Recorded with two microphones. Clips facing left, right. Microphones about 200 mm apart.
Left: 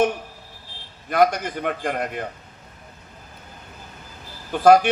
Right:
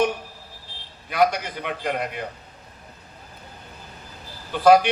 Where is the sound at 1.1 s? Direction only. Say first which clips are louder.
Left 2 dB; 50° left (ahead or behind).